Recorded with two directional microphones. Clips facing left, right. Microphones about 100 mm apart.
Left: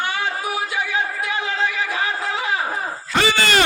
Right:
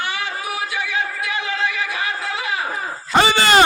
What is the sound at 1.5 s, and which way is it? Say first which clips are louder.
Music: left 1 dB; 35° left (ahead or behind).